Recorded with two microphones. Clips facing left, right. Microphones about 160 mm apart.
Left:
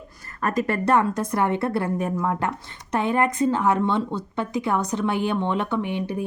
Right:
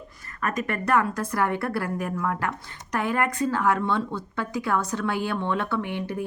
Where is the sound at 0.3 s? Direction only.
35° left (ahead or behind).